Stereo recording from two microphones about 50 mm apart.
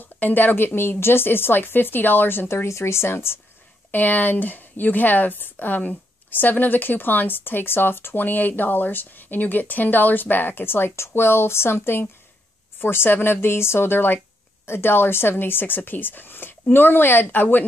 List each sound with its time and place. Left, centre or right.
0.0 s a woman's voice: left
2.4 s speech: left
3.9 s a woman's voice: left